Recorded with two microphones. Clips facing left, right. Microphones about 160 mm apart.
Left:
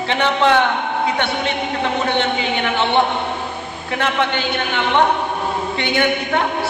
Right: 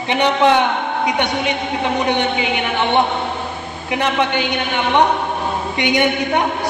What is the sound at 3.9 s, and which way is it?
A man's voice, 15° right (ahead or behind).